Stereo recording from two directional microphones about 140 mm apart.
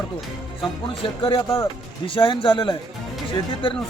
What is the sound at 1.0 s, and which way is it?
Speech, 40° left (ahead or behind).